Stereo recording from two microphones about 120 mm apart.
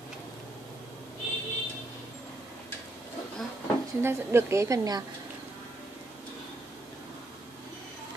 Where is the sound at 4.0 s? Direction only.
20° right (ahead or behind).